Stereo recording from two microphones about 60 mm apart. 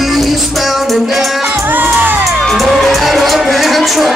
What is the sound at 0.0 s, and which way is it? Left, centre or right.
Music, centre.